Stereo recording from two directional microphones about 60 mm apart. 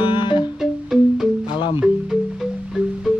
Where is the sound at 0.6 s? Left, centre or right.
Centre.